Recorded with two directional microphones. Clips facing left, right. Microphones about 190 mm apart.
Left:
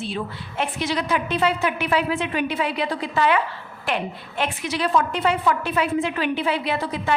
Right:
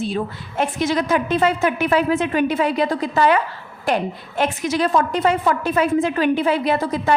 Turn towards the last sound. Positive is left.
turn(degrees=-45)  # may be behind; listen again after turning